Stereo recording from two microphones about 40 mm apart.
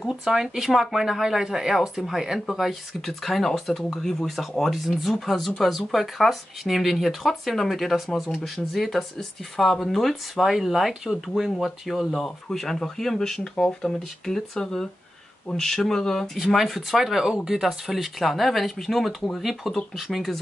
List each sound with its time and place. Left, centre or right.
0.2 s speech: centre
2.6 s speech: centre
4.6 s speech: centre
12.4 s speech: centre
13.4 s speech: left
16.7 s speech: centre